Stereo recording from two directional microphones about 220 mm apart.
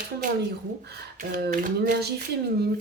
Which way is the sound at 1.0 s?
45° right (ahead or behind).